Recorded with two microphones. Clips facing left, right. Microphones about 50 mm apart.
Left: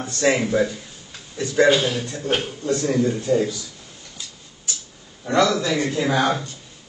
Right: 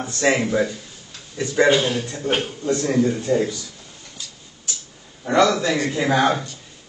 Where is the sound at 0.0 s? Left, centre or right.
Centre.